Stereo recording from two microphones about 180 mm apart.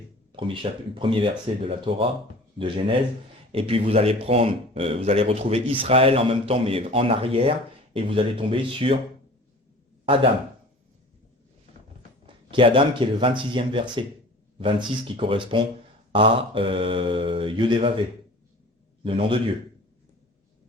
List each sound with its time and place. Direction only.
0.3 s speech: 30° right (ahead or behind)
12.2 s speech: 30° right (ahead or behind)
19.0 s speech: 30° right (ahead or behind)